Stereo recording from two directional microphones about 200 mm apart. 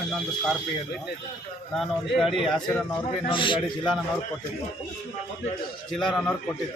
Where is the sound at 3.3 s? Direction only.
25° left (ahead or behind).